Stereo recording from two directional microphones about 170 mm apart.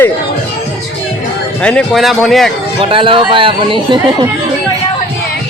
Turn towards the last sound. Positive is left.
turn(degrees=-30)  # may be behind; listen again after turning